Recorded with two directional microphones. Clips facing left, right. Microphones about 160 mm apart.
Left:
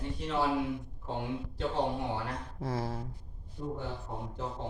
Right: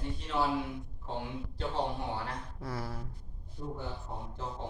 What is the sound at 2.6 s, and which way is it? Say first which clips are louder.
Speech: left 5 dB; 25° left (ahead or behind).